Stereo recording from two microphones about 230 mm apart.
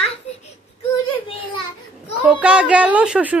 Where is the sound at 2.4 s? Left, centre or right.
Centre.